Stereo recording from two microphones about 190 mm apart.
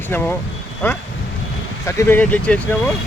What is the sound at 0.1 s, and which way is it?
Speech, 10° left (ahead or behind).